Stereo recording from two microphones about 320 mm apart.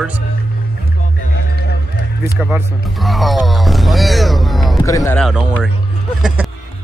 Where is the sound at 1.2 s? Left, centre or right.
Left.